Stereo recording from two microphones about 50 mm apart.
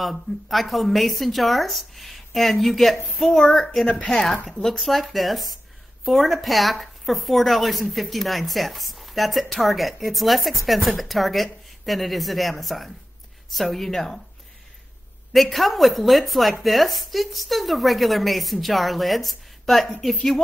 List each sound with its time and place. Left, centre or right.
0.0 s speech: centre
3.8 s speech: left
4.1 s speech: centre
15.3 s speech: centre